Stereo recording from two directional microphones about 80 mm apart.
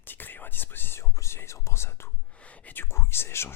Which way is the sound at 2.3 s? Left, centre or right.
Centre.